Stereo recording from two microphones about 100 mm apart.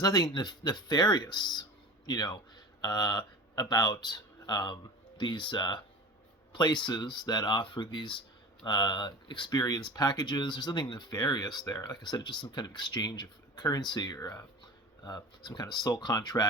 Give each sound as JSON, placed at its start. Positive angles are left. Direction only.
{"t": 0.0, "sound": "speech", "side_deg": 40}
{"t": 15.4, "sound": "speech", "side_deg": 40}